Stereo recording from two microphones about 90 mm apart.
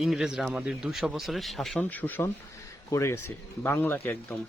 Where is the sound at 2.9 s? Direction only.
30° left (ahead or behind).